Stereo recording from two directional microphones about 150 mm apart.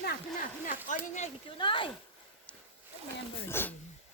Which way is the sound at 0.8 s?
55° left (ahead or behind).